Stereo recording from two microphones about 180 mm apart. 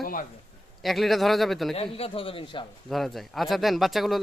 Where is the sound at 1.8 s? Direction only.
35° left (ahead or behind).